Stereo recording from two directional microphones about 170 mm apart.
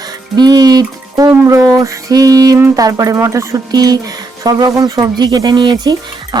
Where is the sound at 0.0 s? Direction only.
25° right (ahead or behind).